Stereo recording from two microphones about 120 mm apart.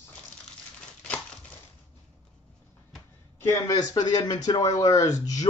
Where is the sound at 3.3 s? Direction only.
25° left (ahead or behind).